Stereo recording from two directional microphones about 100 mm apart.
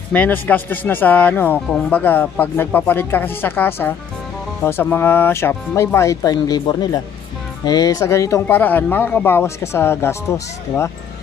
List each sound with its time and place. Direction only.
0.1 s speech: 15° left (ahead or behind); by 8.0 s 45° left (ahead or behind)
8.0 s speech: 30° left (ahead or behind)
8.5 s speech: 20° left (ahead or behind)